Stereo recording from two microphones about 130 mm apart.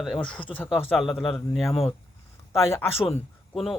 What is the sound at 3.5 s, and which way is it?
Speech, centre (ahead or behind).